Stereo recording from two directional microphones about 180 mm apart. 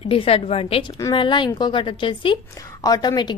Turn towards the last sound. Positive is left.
turn(degrees=25)  # may be behind; listen again after turning